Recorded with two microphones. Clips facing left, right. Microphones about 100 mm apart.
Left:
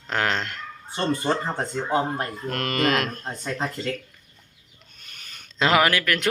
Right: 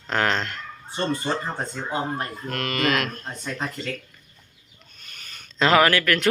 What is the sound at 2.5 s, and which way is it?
Speech, 35° left (ahead or behind).